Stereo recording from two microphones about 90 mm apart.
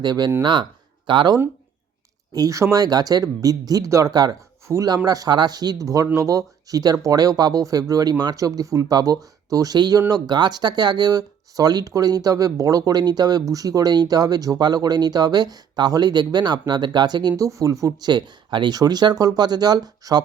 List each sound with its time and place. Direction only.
0.0 s speech: 50° right (ahead or behind)
2.3 s speech: 40° right (ahead or behind)
4.7 s speech: 35° right (ahead or behind)
5.0 s speech: 45° right (ahead or behind)
17.3 s speech: 35° right (ahead or behind)